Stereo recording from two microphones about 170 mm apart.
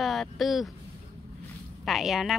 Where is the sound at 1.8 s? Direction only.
Centre (ahead or behind).